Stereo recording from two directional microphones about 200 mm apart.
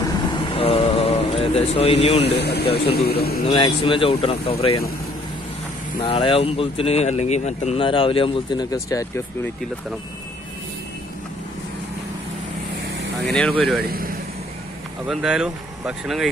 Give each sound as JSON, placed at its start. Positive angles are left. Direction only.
{"t": 0.3, "sound": "mantra", "side_deg": 25}
{"t": 2.2, "sound": "a man's voice", "side_deg": 55}
{"t": 3.4, "sound": "speech", "side_deg": 25}
{"t": 5.9, "sound": "speech", "side_deg": 25}
{"t": 13.3, "sound": "speech", "side_deg": 5}
{"t": 13.8, "sound": "vehicle", "side_deg": -45}
{"t": 15.0, "sound": "speech", "side_deg": -5}